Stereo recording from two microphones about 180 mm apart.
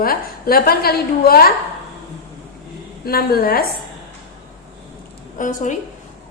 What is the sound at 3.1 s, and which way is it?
Speech, 55° left (ahead or behind).